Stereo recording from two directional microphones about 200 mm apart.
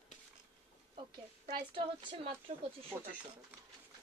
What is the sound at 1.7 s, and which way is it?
Speech, 25° right (ahead or behind).